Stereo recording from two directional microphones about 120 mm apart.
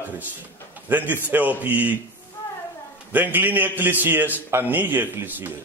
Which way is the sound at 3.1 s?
15° right (ahead or behind).